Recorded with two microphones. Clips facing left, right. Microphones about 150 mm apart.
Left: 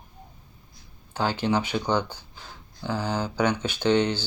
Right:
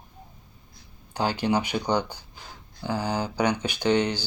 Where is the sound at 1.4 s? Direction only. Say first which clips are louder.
Even; 15° right (ahead or behind).